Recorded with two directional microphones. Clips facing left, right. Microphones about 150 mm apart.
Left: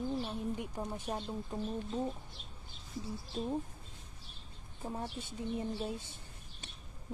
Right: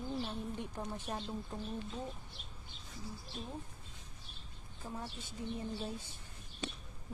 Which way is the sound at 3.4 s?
35° left (ahead or behind).